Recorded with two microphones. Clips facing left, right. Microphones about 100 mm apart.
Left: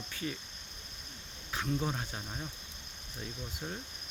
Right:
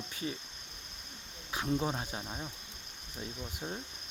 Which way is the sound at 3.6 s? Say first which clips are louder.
Right 1 dB; 20° right (ahead or behind).